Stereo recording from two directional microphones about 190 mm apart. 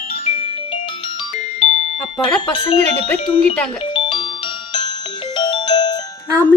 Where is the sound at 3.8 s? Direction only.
25° left (ahead or behind).